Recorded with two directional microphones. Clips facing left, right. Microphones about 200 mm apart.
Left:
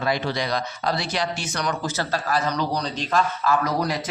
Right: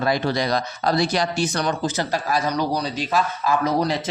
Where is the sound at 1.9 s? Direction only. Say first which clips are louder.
Right 2 dB; 15° right (ahead or behind).